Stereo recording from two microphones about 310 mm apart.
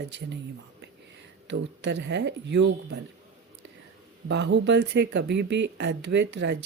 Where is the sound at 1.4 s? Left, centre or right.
Right.